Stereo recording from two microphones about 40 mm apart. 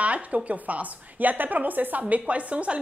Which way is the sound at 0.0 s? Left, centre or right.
Right.